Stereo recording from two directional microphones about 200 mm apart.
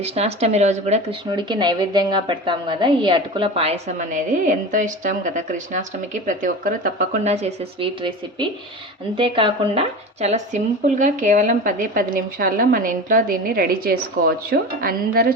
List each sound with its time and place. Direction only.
0.0 s speech: 30° right (ahead or behind); by 15.4 s 45° right (ahead or behind)